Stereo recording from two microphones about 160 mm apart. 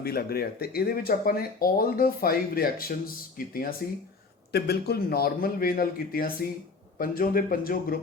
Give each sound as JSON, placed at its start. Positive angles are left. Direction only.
{"t": 0.0, "sound": "speech", "side_deg": 75}
{"t": 4.5, "sound": "speech", "side_deg": 85}